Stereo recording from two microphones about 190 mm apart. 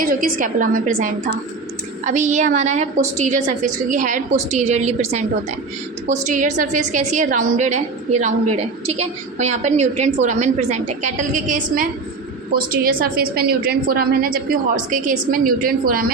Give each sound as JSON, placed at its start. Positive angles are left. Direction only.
{"t": 0.0, "sound": "a woman's voice", "side_deg": -45}
{"t": 8.9, "sound": "a woman's voice", "side_deg": -40}